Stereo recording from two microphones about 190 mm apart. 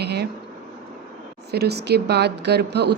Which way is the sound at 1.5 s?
60° right (ahead or behind).